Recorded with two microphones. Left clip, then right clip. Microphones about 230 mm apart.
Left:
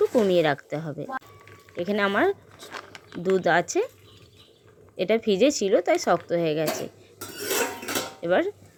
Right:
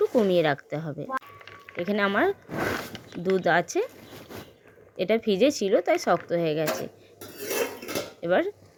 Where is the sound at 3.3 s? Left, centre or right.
Centre.